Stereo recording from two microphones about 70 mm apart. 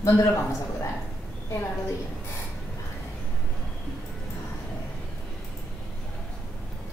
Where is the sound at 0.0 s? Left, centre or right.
Left.